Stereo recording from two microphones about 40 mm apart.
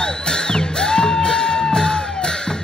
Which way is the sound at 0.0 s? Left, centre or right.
Centre.